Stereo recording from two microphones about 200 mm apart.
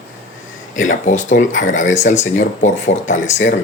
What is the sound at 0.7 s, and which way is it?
Speech, 40° left (ahead or behind).